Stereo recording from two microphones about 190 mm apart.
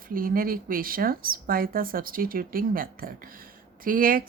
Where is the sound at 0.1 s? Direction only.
50° right (ahead or behind).